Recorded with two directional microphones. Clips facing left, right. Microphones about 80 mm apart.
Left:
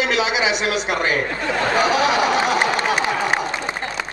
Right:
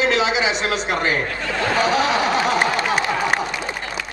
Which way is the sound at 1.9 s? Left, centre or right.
Right.